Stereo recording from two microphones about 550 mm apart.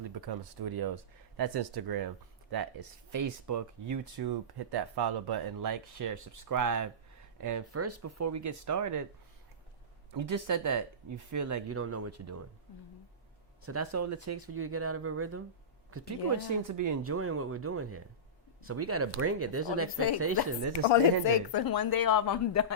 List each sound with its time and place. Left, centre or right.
0.0 s speech: right
10.1 s speech: right
13.7 s speech: right
21.2 s speech: left